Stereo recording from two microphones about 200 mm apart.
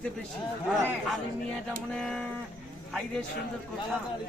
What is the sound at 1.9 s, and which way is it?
Speech, 5° left (ahead or behind).